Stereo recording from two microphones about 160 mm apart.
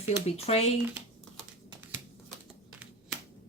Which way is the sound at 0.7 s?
5° right (ahead or behind).